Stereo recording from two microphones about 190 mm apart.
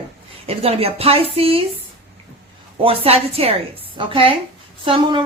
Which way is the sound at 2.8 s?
30° right (ahead or behind).